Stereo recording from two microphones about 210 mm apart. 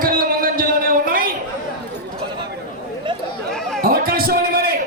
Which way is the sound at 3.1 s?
20° right (ahead or behind).